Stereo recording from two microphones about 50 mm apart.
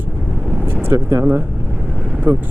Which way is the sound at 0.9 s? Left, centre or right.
Right.